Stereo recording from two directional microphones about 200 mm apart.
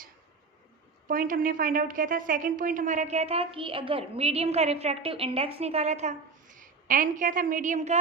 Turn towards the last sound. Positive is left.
turn(degrees=-35)  # may be behind; listen again after turning